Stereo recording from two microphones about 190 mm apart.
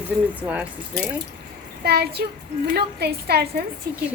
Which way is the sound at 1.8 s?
55° right (ahead or behind).